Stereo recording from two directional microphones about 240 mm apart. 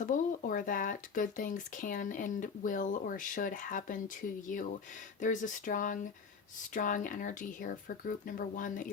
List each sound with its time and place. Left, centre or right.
0.0 s speech: left